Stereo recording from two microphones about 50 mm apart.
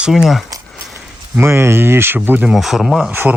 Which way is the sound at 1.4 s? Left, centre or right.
Right.